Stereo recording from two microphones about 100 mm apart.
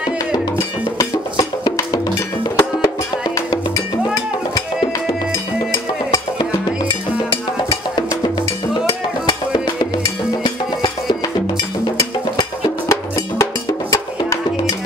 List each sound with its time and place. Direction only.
2.5 s music: 35° left (ahead or behind)
5.7 s music: 40° left (ahead or behind)
10.0 s music: 55° left (ahead or behind)
12.8 s music: 30° left (ahead or behind)